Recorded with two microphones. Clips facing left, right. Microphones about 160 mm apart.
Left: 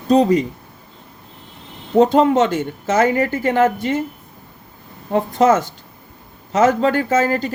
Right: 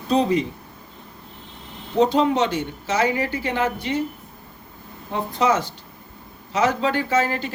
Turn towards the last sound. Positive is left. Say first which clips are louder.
# left 5 dB
turn(degrees=40)  # may be behind; listen again after turning